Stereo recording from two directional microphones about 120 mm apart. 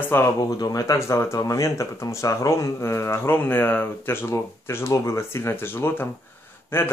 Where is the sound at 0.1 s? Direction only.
25° left (ahead or behind).